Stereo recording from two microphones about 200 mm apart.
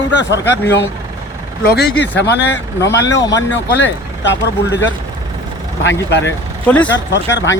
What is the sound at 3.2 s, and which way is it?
Speech, 15° left (ahead or behind).